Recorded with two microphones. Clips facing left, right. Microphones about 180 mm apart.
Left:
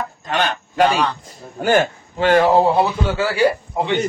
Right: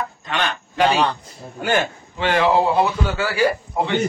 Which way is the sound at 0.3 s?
45° left (ahead or behind).